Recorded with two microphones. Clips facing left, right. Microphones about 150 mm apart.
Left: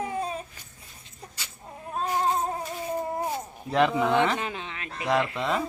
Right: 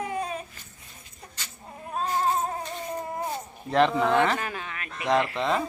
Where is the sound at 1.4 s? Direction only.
10° left (ahead or behind).